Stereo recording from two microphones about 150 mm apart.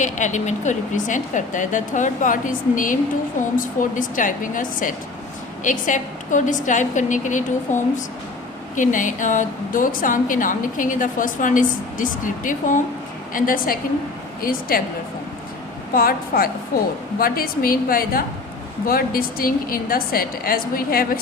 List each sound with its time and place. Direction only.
0.0 s a woman's voice: 55° left (ahead or behind); by 14.8 s 75° left (ahead or behind)
16.0 s a woman's voice: 80° left